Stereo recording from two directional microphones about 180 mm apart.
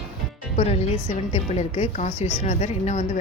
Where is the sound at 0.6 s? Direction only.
35° left (ahead or behind).